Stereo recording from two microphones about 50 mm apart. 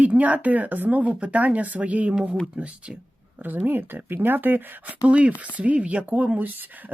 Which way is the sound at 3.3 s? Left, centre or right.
Right.